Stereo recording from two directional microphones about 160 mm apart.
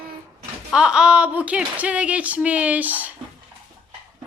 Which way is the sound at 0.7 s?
5° right (ahead or behind).